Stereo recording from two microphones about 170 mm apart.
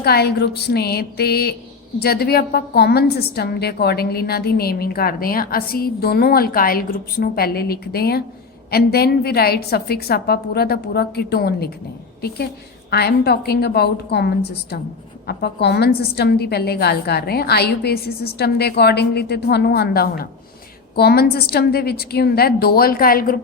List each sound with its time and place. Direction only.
0.0 s a woman's voice: 70° left (ahead or behind)
12.9 s a woman's voice: 70° left (ahead or behind)